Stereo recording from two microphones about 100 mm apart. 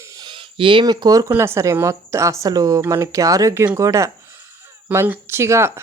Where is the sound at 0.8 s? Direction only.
45° right (ahead or behind).